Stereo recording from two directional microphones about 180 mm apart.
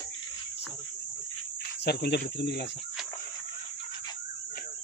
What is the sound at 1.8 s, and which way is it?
Speech, 65° left (ahead or behind).